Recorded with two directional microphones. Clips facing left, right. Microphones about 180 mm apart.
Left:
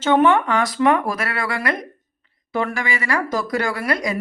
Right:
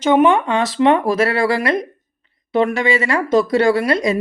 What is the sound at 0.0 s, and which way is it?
A woman's voice, 15° right (ahead or behind).